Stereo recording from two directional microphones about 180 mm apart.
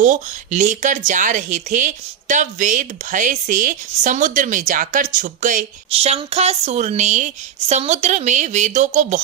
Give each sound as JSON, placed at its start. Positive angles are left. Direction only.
{"t": 0.0, "sound": "a woman's voice", "side_deg": -45}
{"t": 5.9, "sound": "a woman's voice", "side_deg": -35}